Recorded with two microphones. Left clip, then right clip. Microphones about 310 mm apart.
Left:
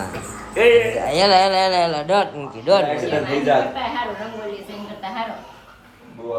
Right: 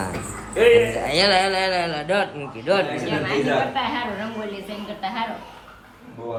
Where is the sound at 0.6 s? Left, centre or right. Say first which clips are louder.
Left 2 dB; centre.